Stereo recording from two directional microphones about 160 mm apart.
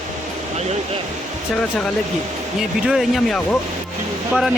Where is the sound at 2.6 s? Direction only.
Centre (ahead or behind).